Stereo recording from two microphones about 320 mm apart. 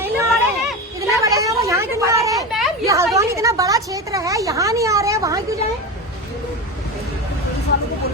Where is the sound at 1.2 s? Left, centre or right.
Centre.